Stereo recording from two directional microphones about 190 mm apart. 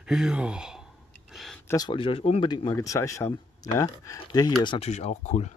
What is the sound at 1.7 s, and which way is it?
Speech, 20° left (ahead or behind).